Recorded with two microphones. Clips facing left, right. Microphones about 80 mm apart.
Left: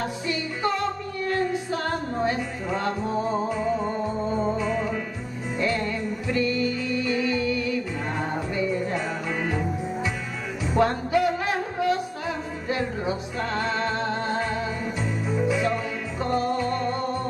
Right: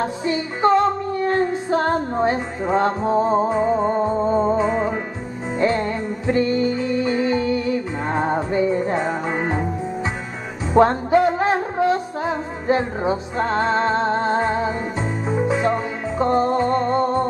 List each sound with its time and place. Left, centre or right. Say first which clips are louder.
0.0 s music: right 6 dB; right
10.7 s music: right 7 dB; right